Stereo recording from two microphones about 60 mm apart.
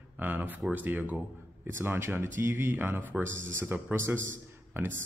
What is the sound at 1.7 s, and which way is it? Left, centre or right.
Speech, right.